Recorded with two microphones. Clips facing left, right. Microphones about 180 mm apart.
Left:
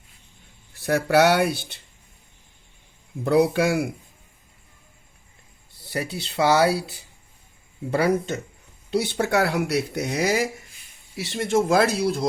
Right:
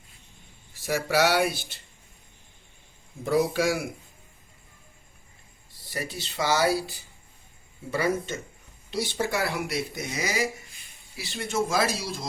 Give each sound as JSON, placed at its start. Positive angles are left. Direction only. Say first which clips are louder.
{"t": 0.7, "sound": "a man's voice", "louder": "left 6 dB", "side_deg": 60}
{"t": 3.2, "sound": "a man's voice", "louder": "left 4 dB", "side_deg": 65}
{"t": 5.9, "sound": "a man's voice", "louder": "left 5 dB", "side_deg": 65}